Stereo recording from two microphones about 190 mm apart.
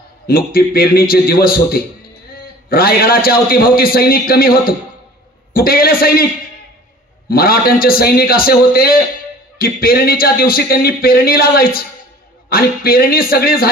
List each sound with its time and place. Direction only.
0.3 s speech: 50° left (ahead or behind)
7.2 s speech: 50° left (ahead or behind)